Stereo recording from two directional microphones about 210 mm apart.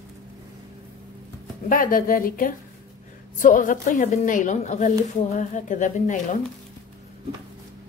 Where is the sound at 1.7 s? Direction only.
40° left (ahead or behind).